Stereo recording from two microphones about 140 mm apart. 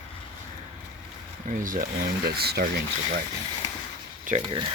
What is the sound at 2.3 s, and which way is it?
Speech, 90° right.